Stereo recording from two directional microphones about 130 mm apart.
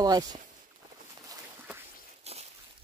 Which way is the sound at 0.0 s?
30° right (ahead or behind).